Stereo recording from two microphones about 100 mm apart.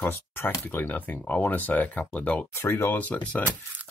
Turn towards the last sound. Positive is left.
turn(degrees=15)  # may be behind; listen again after turning